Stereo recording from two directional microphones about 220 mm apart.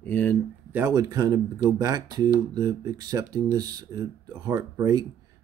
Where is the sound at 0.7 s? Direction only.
10° right (ahead or behind).